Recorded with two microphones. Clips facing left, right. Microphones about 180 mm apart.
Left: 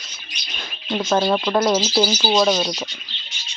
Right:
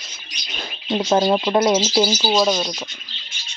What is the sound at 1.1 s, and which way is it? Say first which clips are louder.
Speech: right 1 dB; 15° right (ahead or behind).